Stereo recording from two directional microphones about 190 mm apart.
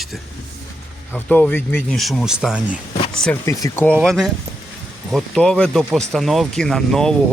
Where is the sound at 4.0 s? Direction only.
Centre (ahead or behind).